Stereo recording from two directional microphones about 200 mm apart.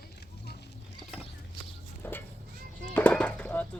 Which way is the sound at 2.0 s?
10° left (ahead or behind).